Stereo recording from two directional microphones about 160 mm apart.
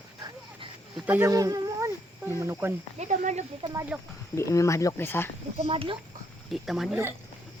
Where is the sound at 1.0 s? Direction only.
10° right (ahead or behind).